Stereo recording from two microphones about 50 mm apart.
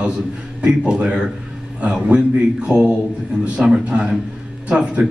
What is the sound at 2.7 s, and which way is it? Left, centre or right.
A man's voice, right.